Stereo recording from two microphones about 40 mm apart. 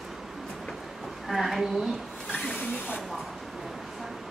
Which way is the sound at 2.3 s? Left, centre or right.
Left.